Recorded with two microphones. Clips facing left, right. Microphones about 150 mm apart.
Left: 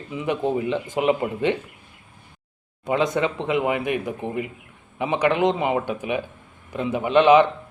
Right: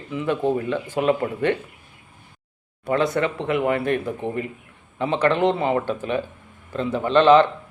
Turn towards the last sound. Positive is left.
turn(degrees=15)  # may be behind; listen again after turning